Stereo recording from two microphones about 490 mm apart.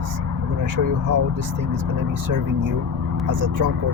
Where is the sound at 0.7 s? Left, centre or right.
Right.